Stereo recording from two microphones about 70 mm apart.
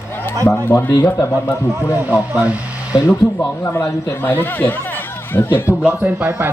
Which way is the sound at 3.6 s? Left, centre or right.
Left.